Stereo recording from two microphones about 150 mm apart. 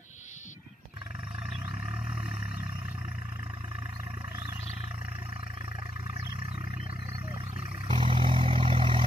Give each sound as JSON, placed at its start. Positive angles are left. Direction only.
{"t": 7.9, "sound": "vehicle", "side_deg": -35}